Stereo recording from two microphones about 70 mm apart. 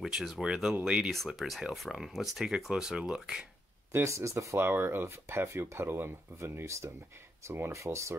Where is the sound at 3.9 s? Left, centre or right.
Right.